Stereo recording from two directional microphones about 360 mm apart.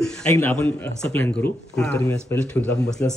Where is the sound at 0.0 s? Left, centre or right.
Centre.